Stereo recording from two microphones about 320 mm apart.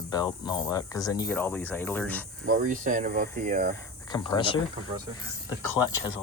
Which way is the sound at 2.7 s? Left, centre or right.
Right.